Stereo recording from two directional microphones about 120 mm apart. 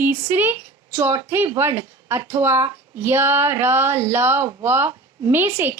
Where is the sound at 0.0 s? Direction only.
15° right (ahead or behind).